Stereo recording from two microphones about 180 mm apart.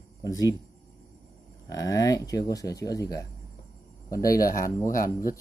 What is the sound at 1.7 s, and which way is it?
Speech, 20° left (ahead or behind).